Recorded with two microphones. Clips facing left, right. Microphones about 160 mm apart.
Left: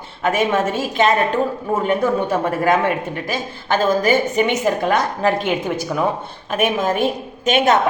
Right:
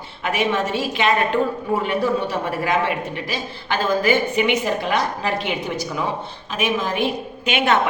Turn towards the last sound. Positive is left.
turn(degrees=40)  # may be behind; listen again after turning